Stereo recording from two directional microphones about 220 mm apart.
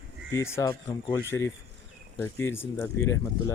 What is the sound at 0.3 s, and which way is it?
Speech, 15° left (ahead or behind).